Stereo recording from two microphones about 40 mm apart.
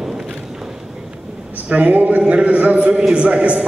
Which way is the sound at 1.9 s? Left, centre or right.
Right.